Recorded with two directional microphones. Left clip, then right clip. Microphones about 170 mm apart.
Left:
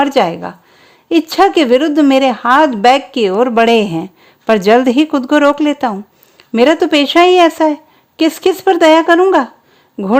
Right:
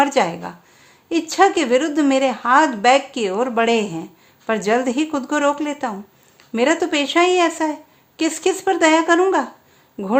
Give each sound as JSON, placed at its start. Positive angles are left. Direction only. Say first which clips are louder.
{"t": 0.0, "sound": "a woman's voice", "louder": "left 5 dB", "side_deg": 45}